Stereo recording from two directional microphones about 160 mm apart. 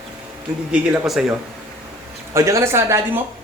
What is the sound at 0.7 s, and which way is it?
Speech, centre (ahead or behind).